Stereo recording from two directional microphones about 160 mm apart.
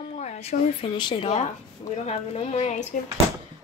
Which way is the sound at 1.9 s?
40° left (ahead or behind).